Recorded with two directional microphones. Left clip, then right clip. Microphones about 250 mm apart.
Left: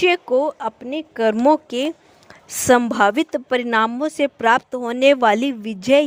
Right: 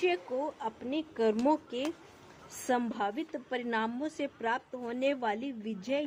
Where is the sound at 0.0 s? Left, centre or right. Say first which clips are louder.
Left 15 dB; left.